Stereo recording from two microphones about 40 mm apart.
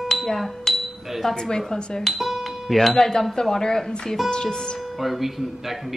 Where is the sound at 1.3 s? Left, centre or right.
Centre.